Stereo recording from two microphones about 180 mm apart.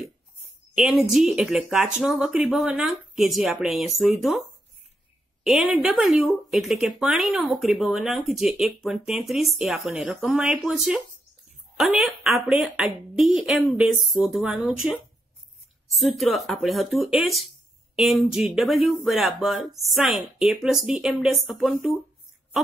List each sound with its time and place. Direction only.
0.7 s speech: 5° right (ahead or behind)
5.4 s speech: centre (ahead or behind)